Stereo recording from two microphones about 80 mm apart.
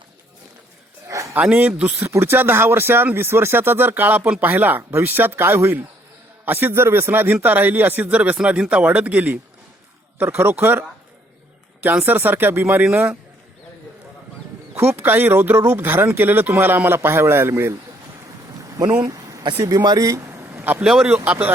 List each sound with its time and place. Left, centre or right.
1.0 s a sound: right
1.4 s speech: centre
2.0 s speech: right
12.0 s speech: right
14.8 s speech: right
19.0 s a sound: right
19.4 s speech: right
19.6 s speech: right
20.8 s speech: centre